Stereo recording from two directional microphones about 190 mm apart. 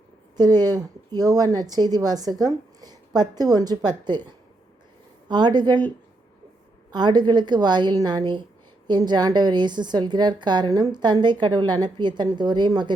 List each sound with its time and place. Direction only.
0.6 s a woman's voice: 20° right (ahead or behind)
5.3 s a woman's voice: 25° right (ahead or behind)
6.9 s a woman's voice: 25° right (ahead or behind)